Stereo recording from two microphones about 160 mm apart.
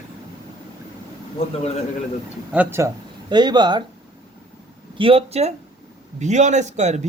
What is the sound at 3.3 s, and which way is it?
Speech, 25° right (ahead or behind).